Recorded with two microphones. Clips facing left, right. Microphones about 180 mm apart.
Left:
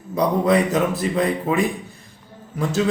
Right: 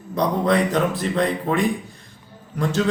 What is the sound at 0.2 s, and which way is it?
A man's voice, 10° left (ahead or behind).